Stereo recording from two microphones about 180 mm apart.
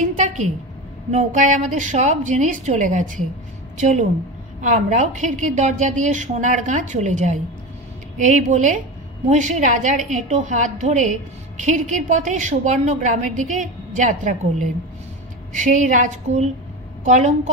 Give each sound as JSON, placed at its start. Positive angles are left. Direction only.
{"t": 0.0, "sound": "a sound", "side_deg": -45}
{"t": 1.1, "sound": "a woman's voice", "side_deg": -45}
{"t": 4.6, "sound": "a woman's voice", "side_deg": -45}